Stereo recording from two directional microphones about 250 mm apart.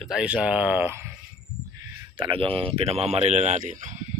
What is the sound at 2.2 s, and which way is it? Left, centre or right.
Speech, right.